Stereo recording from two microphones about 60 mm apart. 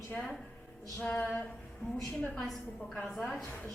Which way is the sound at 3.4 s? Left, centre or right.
Left.